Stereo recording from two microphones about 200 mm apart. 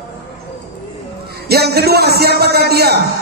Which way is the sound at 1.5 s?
55° right (ahead or behind).